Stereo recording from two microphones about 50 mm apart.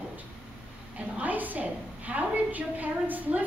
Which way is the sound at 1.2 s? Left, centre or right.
Right.